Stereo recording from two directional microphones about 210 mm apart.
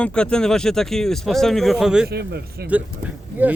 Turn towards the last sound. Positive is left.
turn(degrees=-5)  # may be behind; listen again after turning